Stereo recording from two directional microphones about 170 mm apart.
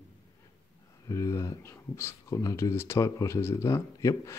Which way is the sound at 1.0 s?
15° left (ahead or behind).